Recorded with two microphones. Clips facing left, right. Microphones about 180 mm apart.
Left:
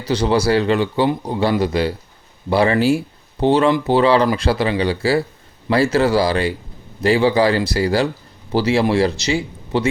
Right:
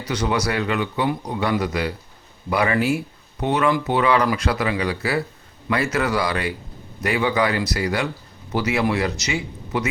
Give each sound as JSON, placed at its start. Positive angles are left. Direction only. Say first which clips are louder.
{"t": 0.1, "sound": "a man's voice", "louder": "left 7 dB", "side_deg": 30}